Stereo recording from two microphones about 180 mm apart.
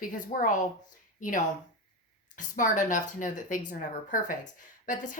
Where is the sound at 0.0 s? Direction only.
50° left (ahead or behind).